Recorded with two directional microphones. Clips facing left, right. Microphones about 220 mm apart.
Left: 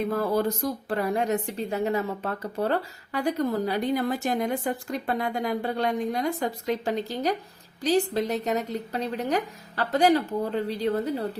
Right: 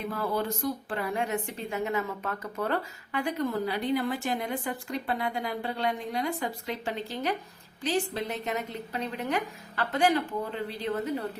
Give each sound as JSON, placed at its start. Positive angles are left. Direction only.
{"t": 0.1, "sound": "speech", "side_deg": 40}